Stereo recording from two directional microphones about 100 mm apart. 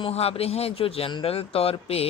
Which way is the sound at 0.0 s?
90° left.